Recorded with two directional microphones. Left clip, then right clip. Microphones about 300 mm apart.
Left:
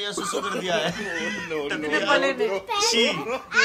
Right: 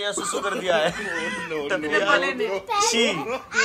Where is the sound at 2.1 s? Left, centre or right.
Left.